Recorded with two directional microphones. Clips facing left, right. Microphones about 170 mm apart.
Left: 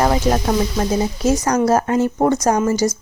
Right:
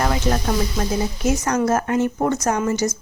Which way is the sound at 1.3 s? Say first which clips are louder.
Left 3 dB; 35° left (ahead or behind).